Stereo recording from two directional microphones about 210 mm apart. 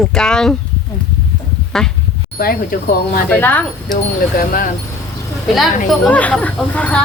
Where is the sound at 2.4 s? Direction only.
45° left (ahead or behind).